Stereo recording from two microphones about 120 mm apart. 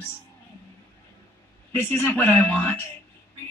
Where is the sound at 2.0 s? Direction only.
5° left (ahead or behind).